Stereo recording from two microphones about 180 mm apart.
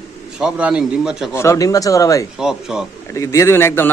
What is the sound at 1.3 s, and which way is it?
Speech, 20° left (ahead or behind).